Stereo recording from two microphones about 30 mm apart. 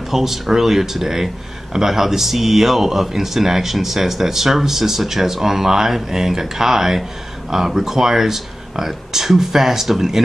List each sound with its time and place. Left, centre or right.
0.1 s speech: centre